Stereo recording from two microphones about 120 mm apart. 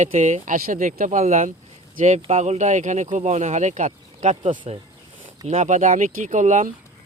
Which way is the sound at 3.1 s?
75° right (ahead or behind).